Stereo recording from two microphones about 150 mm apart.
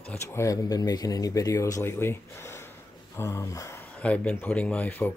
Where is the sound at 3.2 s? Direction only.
20° left (ahead or behind).